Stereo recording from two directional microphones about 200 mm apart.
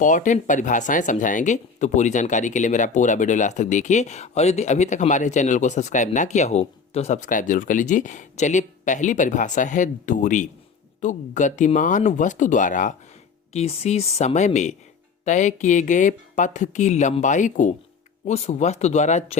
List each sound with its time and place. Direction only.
0.0 s speech: 40° left (ahead or behind)